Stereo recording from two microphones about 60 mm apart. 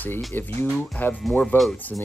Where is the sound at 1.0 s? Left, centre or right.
Left.